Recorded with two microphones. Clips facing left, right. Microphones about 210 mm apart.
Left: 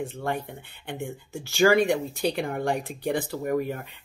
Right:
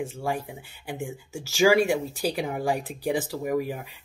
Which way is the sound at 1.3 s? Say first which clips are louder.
Even; 80° right.